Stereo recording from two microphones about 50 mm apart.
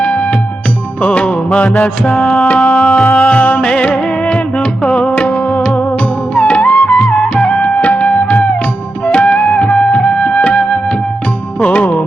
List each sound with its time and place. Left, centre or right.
0.0 s music: left
11.6 s music: left